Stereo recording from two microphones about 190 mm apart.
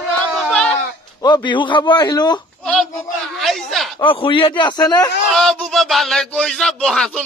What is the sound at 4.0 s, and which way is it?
A man's voice, 25° left (ahead or behind).